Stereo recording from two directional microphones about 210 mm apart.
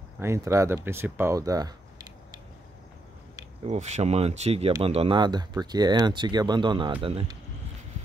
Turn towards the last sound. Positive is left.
turn(degrees=-25)  # may be behind; listen again after turning